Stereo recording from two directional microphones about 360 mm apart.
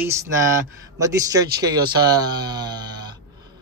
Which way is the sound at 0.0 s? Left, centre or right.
Centre.